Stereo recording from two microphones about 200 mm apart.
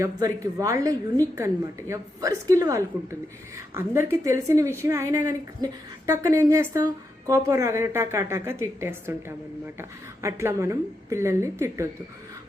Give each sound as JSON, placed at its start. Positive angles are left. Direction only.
{"t": 0.0, "sound": "a woman's voice", "side_deg": -15}